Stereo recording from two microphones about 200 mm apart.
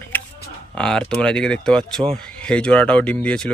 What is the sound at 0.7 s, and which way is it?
Speech, 5° left (ahead or behind).